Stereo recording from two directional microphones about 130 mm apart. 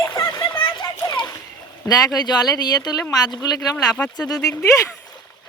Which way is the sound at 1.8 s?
30° left (ahead or behind).